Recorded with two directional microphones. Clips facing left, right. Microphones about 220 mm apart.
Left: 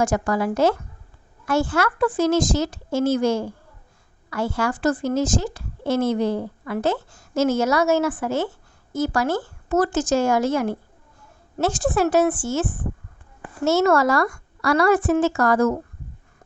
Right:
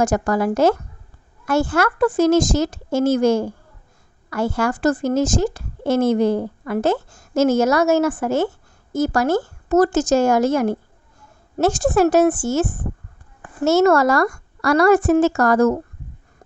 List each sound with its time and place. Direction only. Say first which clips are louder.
0.0 s a woman's voice: right 3 dB; 45° right (ahead or behind)